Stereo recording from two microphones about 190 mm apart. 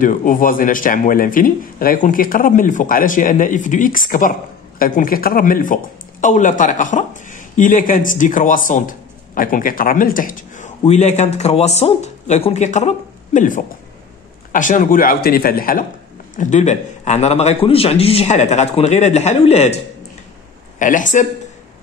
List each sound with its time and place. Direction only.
0.0 s a man's voice: 45° left (ahead or behind)
20.8 s a man's voice: 40° left (ahead or behind)